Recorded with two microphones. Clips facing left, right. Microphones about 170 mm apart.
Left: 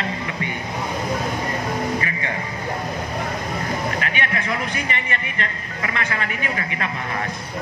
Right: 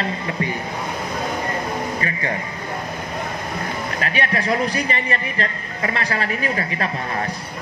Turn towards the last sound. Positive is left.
turn(degrees=-35)  # may be behind; listen again after turning